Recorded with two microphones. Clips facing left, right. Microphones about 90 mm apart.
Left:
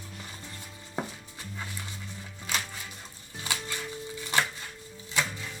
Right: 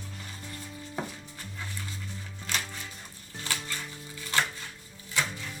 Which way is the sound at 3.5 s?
15° left (ahead or behind).